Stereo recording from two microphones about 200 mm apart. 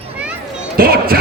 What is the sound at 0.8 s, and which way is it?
Basketball bounce, 45° right (ahead or behind).